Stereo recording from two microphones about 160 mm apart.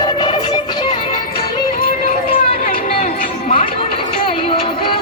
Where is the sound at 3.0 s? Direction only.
55° left (ahead or behind).